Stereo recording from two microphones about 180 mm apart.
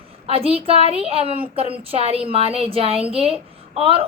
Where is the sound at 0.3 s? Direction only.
30° right (ahead or behind).